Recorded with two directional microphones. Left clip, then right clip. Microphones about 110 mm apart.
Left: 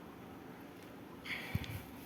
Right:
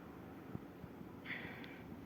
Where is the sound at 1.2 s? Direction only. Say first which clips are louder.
Left 4 dB; 25° left (ahead or behind).